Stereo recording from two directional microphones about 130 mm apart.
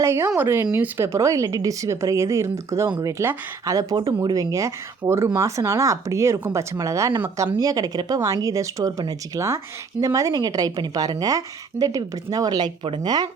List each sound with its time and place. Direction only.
0.0 s speech: 20° right (ahead or behind)